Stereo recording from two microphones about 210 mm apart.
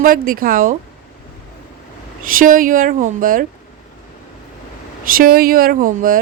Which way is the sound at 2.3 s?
40° right (ahead or behind).